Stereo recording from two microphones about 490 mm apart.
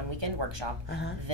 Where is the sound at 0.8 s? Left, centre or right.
Left.